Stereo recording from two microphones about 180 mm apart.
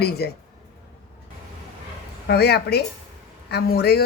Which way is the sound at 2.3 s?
65° left (ahead or behind).